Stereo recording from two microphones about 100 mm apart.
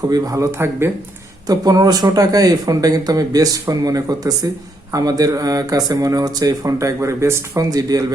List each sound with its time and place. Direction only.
0.1 s speech: 35° right (ahead or behind)